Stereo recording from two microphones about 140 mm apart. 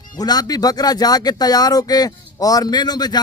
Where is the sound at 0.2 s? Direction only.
30° left (ahead or behind).